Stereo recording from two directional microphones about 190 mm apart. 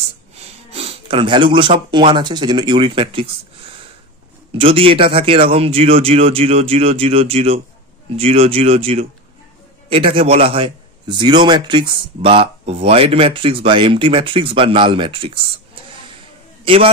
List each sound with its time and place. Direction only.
0.7 s speech: 30° right (ahead or behind)
4.6 s a man's voice: 30° right (ahead or behind)